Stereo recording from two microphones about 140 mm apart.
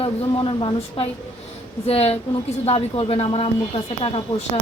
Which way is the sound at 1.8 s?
45° left (ahead or behind).